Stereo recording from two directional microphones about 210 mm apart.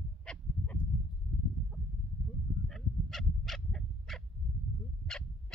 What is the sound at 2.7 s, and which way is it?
Dog, centre (ahead or behind).